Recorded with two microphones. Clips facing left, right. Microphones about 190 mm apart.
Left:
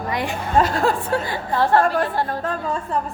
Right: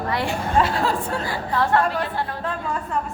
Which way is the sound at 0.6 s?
45° left (ahead or behind).